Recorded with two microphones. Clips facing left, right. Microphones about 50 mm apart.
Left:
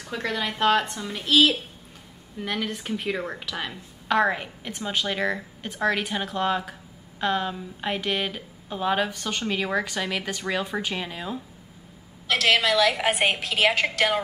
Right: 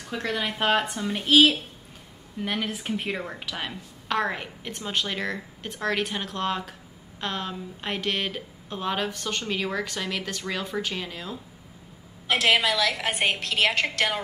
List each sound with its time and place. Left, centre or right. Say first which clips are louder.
0.0 s a woman's voice: even; centre
12.3 s speech: even; centre
12.6 s a woman's voice: left 4 dB; centre